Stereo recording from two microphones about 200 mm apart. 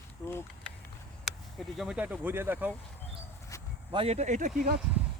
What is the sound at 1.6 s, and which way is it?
Speech, centre (ahead or behind).